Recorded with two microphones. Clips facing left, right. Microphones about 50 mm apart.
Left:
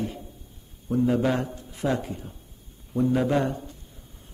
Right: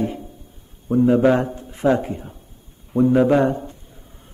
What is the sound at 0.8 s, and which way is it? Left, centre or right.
A man's voice, right.